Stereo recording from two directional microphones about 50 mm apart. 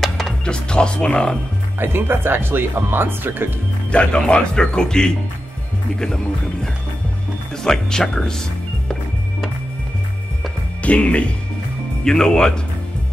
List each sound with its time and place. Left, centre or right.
0.5 s speech: centre
1.8 s speech: right
3.9 s speech: left
10.8 s speech: left
12.0 s speech: centre